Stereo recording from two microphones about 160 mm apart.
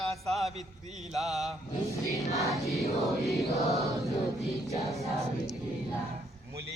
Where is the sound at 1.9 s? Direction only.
20° left (ahead or behind).